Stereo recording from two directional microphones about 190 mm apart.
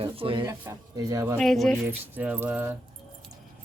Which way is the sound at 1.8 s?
10° right (ahead or behind).